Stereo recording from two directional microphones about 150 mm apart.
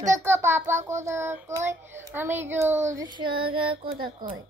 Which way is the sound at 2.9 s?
25° right (ahead or behind).